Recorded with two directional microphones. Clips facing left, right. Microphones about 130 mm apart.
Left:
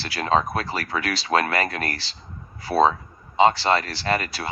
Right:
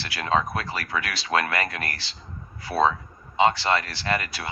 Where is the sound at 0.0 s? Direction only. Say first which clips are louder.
Left 3 dB; 35° left (ahead or behind).